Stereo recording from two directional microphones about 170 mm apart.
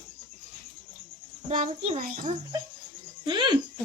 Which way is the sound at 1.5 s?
40° right (ahead or behind).